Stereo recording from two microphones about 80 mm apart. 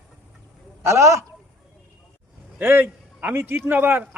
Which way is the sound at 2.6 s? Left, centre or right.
Right.